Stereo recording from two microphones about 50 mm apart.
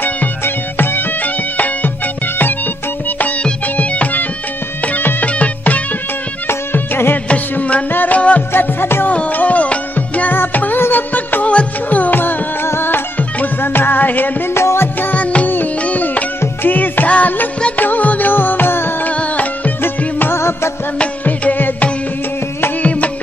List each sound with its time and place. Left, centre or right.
0.7 s music: left
3.6 s music: left
6.7 s music: left
7.5 s music: left
8.5 s music: left
9.0 s music: left
11.4 s music: left
12.6 s music: left
14.5 s music: left
15.0 s music: left
19.0 s music: left
20.2 s music: left
21.3 s music: left
22.8 s music: left